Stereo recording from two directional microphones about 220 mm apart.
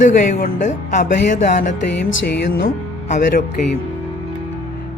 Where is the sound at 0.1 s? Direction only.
40° left (ahead or behind).